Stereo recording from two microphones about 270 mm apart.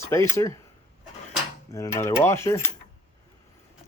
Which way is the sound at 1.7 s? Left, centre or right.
Centre.